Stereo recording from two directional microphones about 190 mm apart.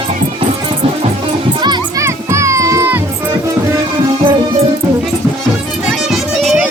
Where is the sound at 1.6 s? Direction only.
20° right (ahead or behind).